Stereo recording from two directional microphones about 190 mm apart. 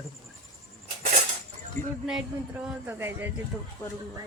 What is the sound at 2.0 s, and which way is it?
Speech, 5° right (ahead or behind).